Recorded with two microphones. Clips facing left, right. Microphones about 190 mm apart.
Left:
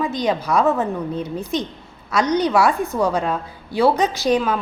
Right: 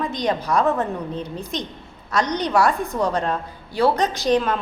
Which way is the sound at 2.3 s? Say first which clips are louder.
Left 3 dB; 5° left (ahead or behind).